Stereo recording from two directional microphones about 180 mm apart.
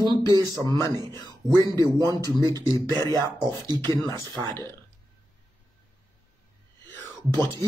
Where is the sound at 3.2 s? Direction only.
20° right (ahead or behind).